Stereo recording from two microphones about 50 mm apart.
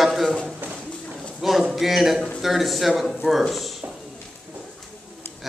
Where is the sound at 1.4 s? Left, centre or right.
Centre.